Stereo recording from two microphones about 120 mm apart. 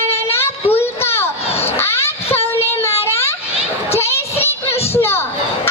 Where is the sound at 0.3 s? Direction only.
20° left (ahead or behind).